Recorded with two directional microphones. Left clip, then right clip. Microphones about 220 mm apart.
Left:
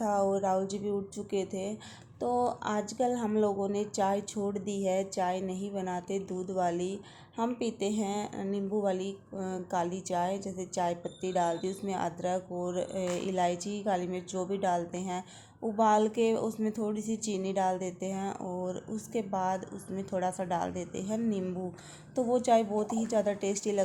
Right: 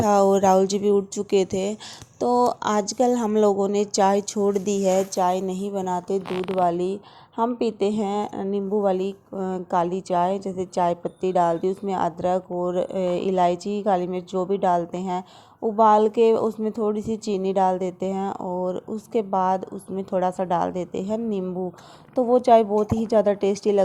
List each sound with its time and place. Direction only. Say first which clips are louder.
0.0 s speech: right 11 dB; 40° right (ahead or behind)